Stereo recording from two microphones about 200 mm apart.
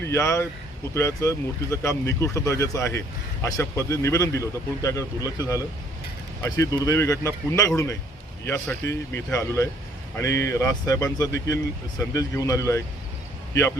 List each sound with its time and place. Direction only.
0.0 s speech: 15° left (ahead or behind)